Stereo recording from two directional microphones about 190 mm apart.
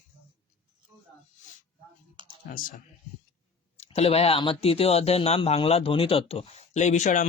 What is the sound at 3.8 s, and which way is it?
Speech, 35° left (ahead or behind).